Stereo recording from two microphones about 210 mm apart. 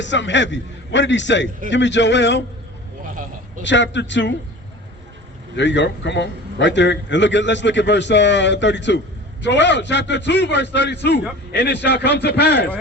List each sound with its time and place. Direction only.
0.0 s a man's voice: 60° left (ahead or behind)
3.6 s a man's voice: 60° left (ahead or behind)
5.5 s a man's voice: 60° left (ahead or behind)